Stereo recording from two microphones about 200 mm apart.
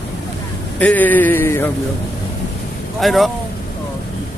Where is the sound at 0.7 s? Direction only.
10° left (ahead or behind).